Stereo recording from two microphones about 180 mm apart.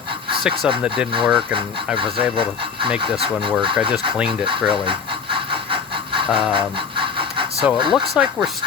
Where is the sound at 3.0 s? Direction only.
30° right (ahead or behind).